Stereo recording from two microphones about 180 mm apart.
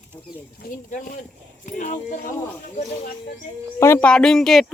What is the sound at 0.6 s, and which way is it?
Speech, 50° left (ahead or behind).